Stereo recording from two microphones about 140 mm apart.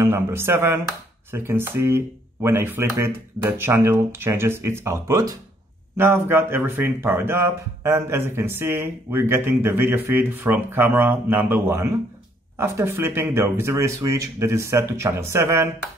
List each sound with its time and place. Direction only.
0.0 s speech: 15° right (ahead or behind)